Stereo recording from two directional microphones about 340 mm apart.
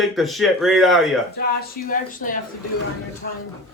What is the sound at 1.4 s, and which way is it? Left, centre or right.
Speech, left.